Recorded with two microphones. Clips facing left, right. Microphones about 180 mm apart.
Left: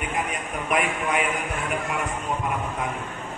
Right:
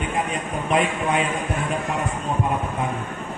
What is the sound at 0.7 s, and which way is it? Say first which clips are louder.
Speech: right 3 dB; 30° right (ahead or behind).